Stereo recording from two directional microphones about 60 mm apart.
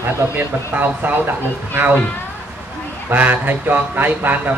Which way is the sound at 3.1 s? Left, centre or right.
Right.